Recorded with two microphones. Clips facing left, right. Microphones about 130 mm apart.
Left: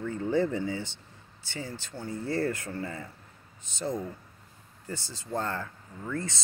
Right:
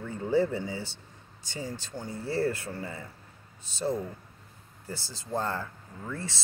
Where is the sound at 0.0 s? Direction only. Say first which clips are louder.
Right 1 dB; 10° right (ahead or behind).